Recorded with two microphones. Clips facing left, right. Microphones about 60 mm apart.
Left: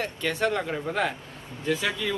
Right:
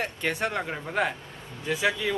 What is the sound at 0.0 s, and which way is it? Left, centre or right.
Speech, right.